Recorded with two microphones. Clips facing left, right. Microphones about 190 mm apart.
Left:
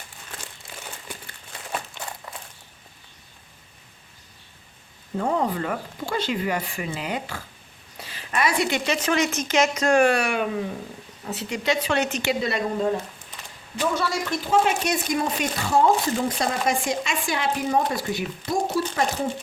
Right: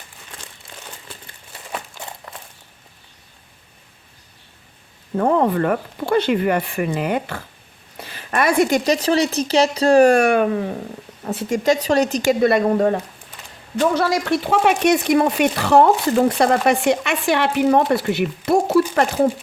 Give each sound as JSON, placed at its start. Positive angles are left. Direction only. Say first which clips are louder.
{"t": 5.1, "sound": "speech", "louder": "right 7 dB", "side_deg": -55}
{"t": 12.4, "sound": "speech", "louder": "right 12 dB", "side_deg": -55}